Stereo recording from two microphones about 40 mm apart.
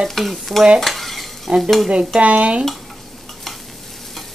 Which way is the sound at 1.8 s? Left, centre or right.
Right.